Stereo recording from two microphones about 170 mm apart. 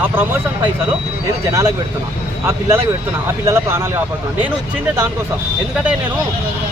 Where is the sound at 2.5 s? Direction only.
15° right (ahead or behind).